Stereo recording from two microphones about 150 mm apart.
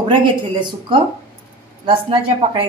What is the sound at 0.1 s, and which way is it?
Speech, 30° right (ahead or behind).